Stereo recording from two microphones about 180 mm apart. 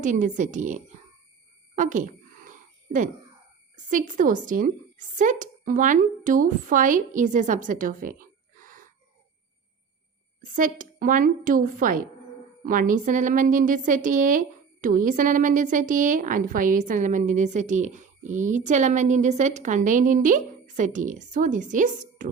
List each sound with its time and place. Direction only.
0.0 s a woman's voice: 45° right (ahead or behind)
1.7 s a sound: 45° right (ahead or behind)
3.8 s a woman's voice: 45° right (ahead or behind)
10.5 s a woman's voice: 45° right (ahead or behind)